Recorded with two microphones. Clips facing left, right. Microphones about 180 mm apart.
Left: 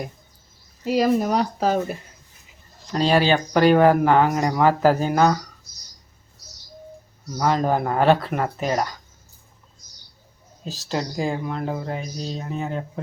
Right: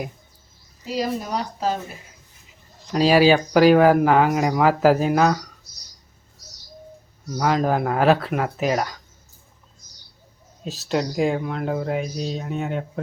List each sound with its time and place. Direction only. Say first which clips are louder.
0.9 s speech: left 6 dB; 60° left (ahead or behind)
2.9 s speech: right 3 dB; 5° right (ahead or behind)
7.3 s speech: even; centre (ahead or behind)
10.6 s speech: right 3 dB; centre (ahead or behind)